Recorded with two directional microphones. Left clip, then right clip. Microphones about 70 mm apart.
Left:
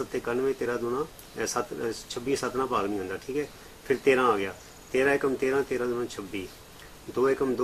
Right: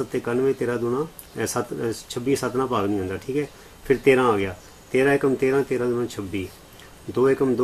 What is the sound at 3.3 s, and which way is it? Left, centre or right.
Speech, right.